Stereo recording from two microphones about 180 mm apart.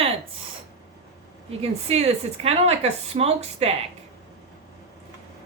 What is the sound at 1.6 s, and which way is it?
A woman's voice, 35° right (ahead or behind).